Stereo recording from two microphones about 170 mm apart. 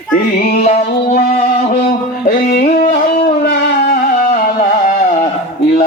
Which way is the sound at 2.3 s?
60° left (ahead or behind).